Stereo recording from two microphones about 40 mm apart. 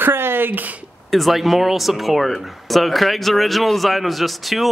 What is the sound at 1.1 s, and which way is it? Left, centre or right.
Speech, centre.